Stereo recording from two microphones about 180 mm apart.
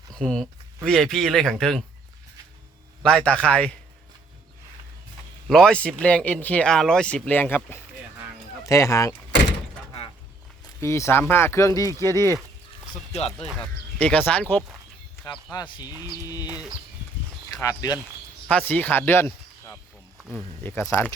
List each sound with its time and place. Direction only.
0.9 s speech: centre (ahead or behind)
3.0 s speech: 5° left (ahead or behind)
5.5 s speech: 5° left (ahead or behind)
10.8 s speech: 15° left (ahead or behind)
13.1 s speech: 35° left (ahead or behind)
14.0 s speech: 10° left (ahead or behind)
15.5 s speech: 25° left (ahead or behind)
17.5 s speech: 20° left (ahead or behind)
18.4 s speech: 10° left (ahead or behind)